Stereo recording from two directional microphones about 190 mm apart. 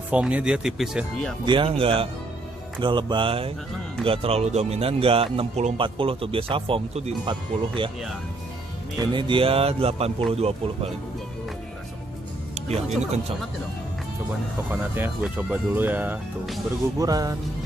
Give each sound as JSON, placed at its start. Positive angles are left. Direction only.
{"t": 0.1, "sound": "speech", "side_deg": -5}
{"t": 1.4, "sound": "a man's voice", "side_deg": -25}
{"t": 9.0, "sound": "a man's voice", "side_deg": -25}
{"t": 12.5, "sound": "music", "side_deg": -35}
{"t": 14.7, "sound": "a man's voice", "side_deg": -10}